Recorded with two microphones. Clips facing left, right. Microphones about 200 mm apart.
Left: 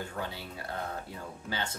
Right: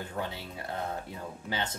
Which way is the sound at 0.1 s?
20° right (ahead or behind).